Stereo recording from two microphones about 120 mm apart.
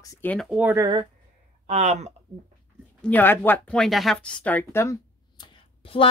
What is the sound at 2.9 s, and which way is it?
Speech, 15° left (ahead or behind).